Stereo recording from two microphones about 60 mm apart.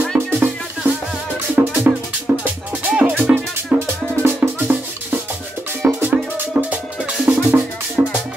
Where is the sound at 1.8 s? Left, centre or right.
Right.